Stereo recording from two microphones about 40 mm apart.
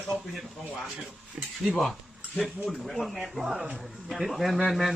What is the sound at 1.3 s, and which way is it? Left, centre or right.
Speech, right.